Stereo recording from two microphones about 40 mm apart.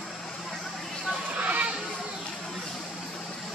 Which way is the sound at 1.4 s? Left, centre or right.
Right.